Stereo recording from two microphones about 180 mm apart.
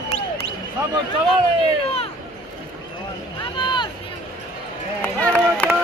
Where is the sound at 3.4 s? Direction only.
25° left (ahead or behind).